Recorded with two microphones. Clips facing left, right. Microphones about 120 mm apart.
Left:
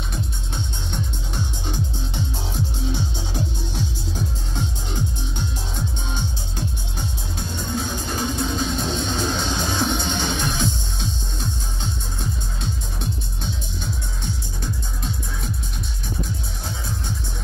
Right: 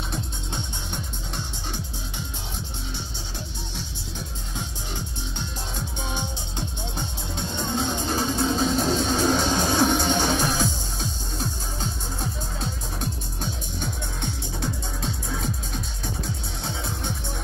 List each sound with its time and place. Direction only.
7.7 s music: 30° right (ahead or behind)